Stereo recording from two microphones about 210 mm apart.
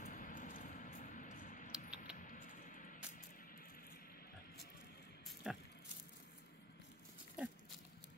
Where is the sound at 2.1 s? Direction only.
40° left (ahead or behind).